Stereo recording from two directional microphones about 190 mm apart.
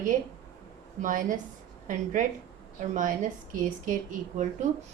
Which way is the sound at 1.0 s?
45° right (ahead or behind).